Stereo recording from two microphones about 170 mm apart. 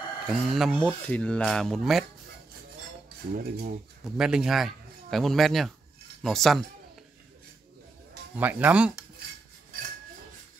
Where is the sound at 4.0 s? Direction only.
5° right (ahead or behind).